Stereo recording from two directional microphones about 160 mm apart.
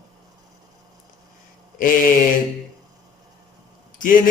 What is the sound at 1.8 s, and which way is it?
Speech, 55° left (ahead or behind).